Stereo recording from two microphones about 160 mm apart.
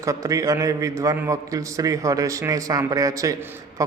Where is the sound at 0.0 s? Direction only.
20° right (ahead or behind).